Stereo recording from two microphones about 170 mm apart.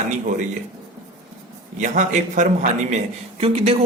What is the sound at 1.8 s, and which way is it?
A man's voice, 45° right (ahead or behind).